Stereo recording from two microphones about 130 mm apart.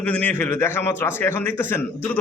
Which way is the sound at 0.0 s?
10° left (ahead or behind).